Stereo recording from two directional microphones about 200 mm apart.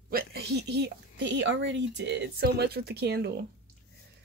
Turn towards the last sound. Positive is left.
turn(degrees=-55)  # may be behind; listen again after turning